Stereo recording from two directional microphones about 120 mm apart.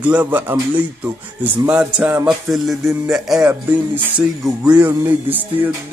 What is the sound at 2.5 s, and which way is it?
Speech, centre (ahead or behind).